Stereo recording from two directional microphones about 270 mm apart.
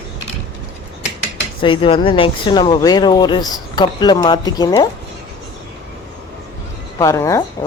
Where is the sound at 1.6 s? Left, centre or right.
Centre.